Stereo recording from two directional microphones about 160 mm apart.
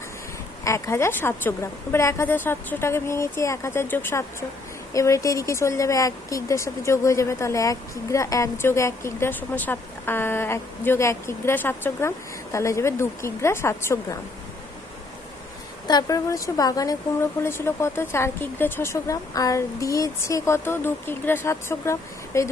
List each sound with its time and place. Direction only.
0.6 s speech: 15° left (ahead or behind)
15.9 s speech: 25° left (ahead or behind)